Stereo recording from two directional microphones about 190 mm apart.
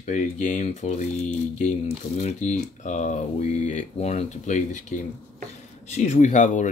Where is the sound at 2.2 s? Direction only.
40° left (ahead or behind).